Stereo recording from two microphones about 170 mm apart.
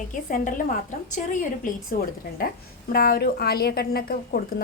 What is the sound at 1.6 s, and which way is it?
Speech, 50° left (ahead or behind).